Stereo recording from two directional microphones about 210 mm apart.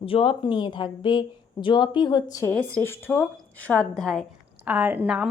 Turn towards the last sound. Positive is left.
turn(degrees=-5)  # may be behind; listen again after turning